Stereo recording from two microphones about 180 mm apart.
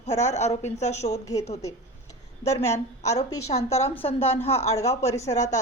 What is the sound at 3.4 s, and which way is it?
Speech, 35° left (ahead or behind).